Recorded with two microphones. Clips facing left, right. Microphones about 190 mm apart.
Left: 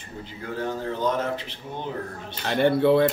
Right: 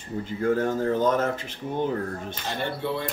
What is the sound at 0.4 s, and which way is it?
Speech, 45° right (ahead or behind).